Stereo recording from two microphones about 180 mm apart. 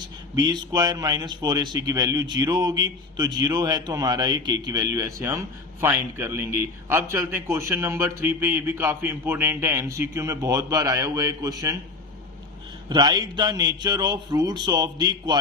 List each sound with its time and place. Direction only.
0.3 s a man's voice: 20° right (ahead or behind)
12.9 s a man's voice: 25° right (ahead or behind)